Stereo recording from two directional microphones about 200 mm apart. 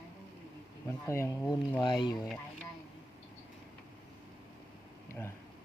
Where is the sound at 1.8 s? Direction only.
25° left (ahead or behind).